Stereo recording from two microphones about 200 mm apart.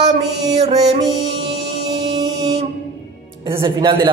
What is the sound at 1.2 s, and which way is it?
Music, 20° right (ahead or behind).